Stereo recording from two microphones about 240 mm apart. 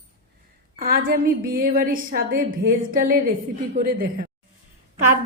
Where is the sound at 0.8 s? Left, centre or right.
Right.